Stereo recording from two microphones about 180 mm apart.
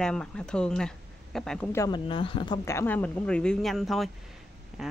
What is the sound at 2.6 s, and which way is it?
Speech, 10° left (ahead or behind).